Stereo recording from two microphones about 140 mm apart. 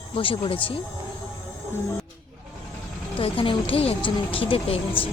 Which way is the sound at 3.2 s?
40° left (ahead or behind).